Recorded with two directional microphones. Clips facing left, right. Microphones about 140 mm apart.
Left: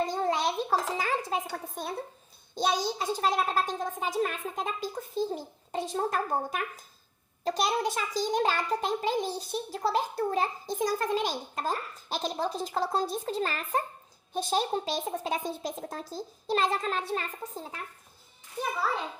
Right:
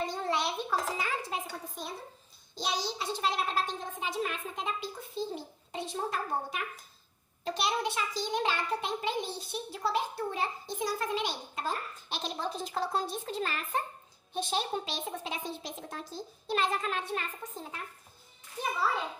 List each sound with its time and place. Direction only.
0.0 s a sound: 40° left (ahead or behind)
0.9 s a child's voice: 40° left (ahead or behind)
1.5 s a woman's voice: 60° left (ahead or behind); by 17.6 s 35° left (ahead or behind)